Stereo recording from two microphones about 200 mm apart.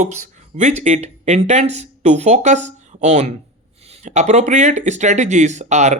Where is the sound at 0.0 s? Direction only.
35° right (ahead or behind).